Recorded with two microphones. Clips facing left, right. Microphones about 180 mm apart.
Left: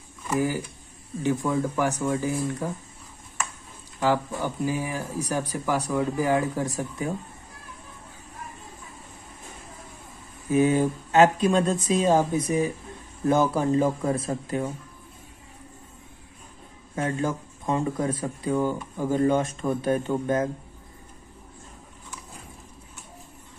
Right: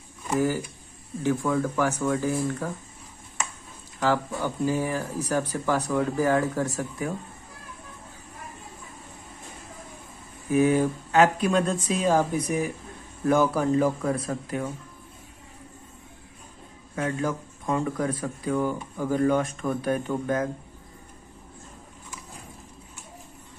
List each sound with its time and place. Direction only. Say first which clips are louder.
1.2 s speech: even; 20° left (ahead or behind)
4.0 s speech: left 1 dB; 15° left (ahead or behind)
10.5 s speech: even; 20° left (ahead or behind)
16.9 s speech: left 1 dB; 25° left (ahead or behind)